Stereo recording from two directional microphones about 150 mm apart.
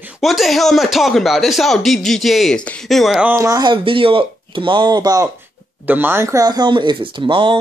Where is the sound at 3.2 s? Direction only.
15° right (ahead or behind).